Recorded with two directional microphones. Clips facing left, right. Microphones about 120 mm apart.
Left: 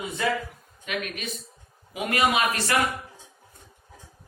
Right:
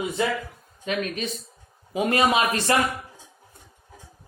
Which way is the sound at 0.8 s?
30° right (ahead or behind).